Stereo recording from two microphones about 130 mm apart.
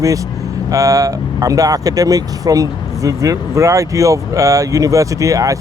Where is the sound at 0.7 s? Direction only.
25° right (ahead or behind).